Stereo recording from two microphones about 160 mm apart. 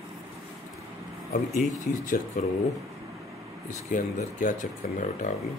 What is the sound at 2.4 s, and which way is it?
Speech, 50° left (ahead or behind).